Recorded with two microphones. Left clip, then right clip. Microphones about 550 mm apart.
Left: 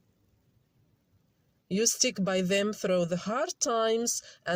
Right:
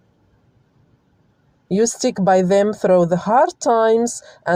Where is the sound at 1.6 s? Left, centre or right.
Left.